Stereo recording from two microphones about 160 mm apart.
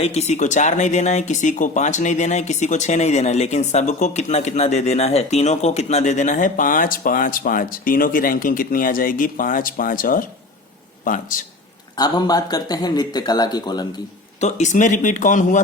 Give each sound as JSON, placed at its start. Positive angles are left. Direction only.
{"t": 0.0, "sound": "speech", "side_deg": 40}
{"t": 11.9, "sound": "speech", "side_deg": 25}
{"t": 14.4, "sound": "speech", "side_deg": 50}